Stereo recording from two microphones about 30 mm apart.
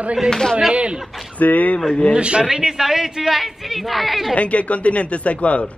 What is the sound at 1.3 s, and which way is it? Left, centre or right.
Speech, left.